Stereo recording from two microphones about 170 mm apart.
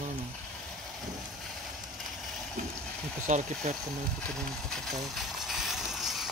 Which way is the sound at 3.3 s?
45° right (ahead or behind).